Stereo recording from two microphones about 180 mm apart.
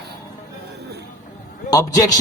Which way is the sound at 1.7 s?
20° left (ahead or behind).